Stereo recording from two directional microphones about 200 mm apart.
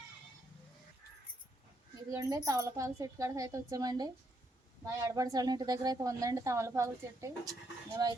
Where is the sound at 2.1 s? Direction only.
15° right (ahead or behind).